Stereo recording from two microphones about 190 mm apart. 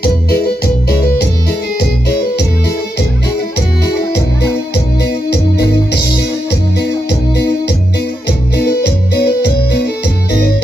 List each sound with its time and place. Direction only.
0.0 s keyboard: 55° left (ahead or behind)
5.0 s music: 60° left (ahead or behind)
8.3 s keyboard: 60° left (ahead or behind)